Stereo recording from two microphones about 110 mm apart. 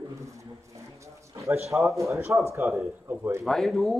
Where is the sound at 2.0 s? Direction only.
25° right (ahead or behind).